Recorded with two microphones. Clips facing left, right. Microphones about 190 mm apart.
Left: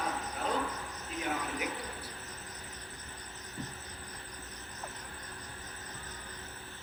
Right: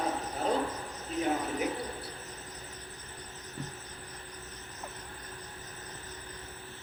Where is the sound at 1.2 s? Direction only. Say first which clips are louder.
Right 5 dB; 35° right (ahead or behind).